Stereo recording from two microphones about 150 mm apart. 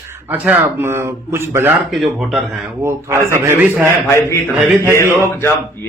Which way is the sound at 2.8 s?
20° right (ahead or behind).